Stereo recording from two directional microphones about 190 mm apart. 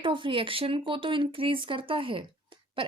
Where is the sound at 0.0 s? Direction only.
25° right (ahead or behind).